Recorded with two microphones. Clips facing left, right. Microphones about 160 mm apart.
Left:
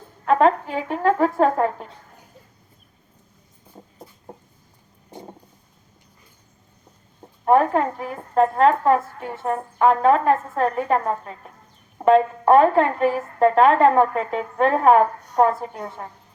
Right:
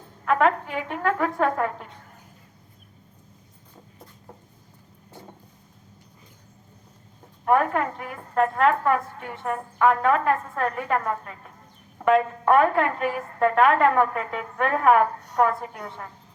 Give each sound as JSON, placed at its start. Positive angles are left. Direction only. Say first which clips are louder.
{"t": 0.3, "sound": "a woman's voice", "louder": "left 4 dB", "side_deg": 30}
{"t": 5.1, "sound": "vehicle", "louder": "left 6 dB", "side_deg": 15}
{"t": 7.4, "sound": "a woman's voice", "louder": "left 4 dB", "side_deg": 30}